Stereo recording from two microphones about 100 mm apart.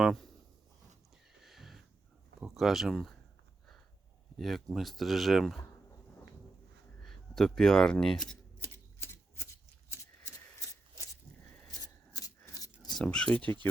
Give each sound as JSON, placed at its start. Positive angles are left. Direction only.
{"t": 0.0, "sound": "a sound", "side_deg": 0}
{"t": 1.4, "sound": "a sound", "side_deg": 0}
{"t": 2.4, "sound": "speech", "side_deg": -5}
{"t": 4.4, "sound": "speech", "side_deg": 0}
{"t": 7.0, "sound": "a sound", "side_deg": 5}
{"t": 8.6, "sound": "typewriter", "side_deg": 25}
{"t": 10.2, "sound": "shuffling cards", "side_deg": 35}
{"t": 11.7, "sound": "rub", "side_deg": 40}
{"t": 13.0, "sound": "speech", "side_deg": 10}